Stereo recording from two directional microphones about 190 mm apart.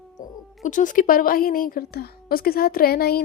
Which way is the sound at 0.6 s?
40° left (ahead or behind).